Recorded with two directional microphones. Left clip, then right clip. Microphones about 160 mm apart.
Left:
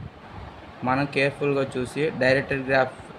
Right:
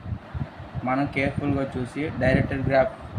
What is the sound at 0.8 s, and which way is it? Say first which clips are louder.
A man's voice: left 2 dB; 85° left.